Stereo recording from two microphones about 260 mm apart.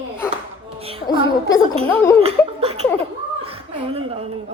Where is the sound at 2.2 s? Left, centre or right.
Right.